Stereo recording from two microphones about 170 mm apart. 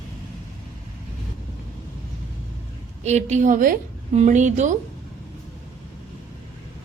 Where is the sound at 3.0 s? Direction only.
40° right (ahead or behind).